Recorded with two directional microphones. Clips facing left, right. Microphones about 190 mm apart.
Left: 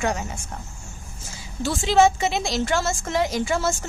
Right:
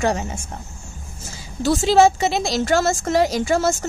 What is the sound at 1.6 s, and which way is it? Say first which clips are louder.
A woman's voice: right 4 dB; 40° right (ahead or behind).